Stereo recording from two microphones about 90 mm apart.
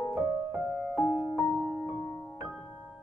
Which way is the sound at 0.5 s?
20° right (ahead or behind).